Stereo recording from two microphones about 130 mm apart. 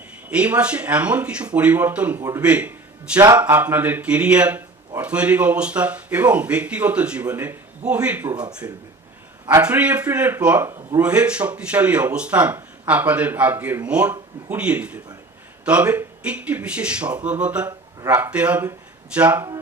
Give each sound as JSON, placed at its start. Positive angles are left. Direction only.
{"t": 0.3, "sound": "a man's voice", "side_deg": -10}
{"t": 8.6, "sound": "speech", "side_deg": -20}
{"t": 9.6, "sound": "speech", "side_deg": -10}
{"t": 11.0, "sound": "speech", "side_deg": -10}
{"t": 17.7, "sound": "a sound", "side_deg": -30}
{"t": 18.2, "sound": "speech", "side_deg": -10}